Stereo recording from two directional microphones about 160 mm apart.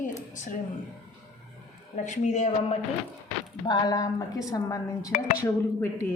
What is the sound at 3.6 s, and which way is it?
A woman's voice, 25° left (ahead or behind).